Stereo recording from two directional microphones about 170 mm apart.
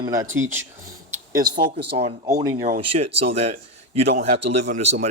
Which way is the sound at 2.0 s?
40° right (ahead or behind).